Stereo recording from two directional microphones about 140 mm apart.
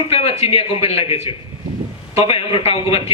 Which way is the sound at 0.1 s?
45° left (ahead or behind).